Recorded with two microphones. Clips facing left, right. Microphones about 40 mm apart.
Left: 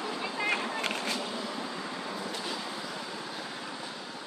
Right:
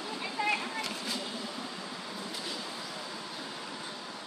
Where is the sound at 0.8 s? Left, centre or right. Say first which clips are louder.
Left 4 dB; left.